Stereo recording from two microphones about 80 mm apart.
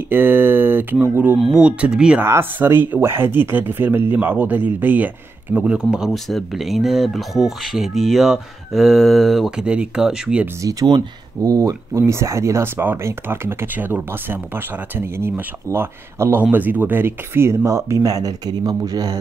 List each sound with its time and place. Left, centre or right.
0.1 s a sound: right
1.0 s speech: right
2.2 s speech: right; by 6.1 s centre
6.1 s speech: centre
10.6 s speech: right